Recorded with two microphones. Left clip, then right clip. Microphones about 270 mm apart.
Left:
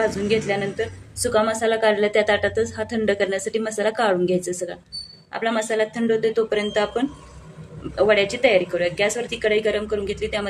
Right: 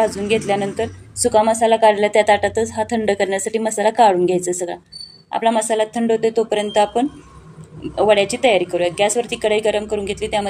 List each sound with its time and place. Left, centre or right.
0.0 s a woman's voice: centre